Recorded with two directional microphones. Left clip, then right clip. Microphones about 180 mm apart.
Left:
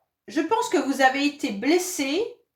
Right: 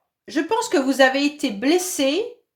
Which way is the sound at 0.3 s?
50° right (ahead or behind).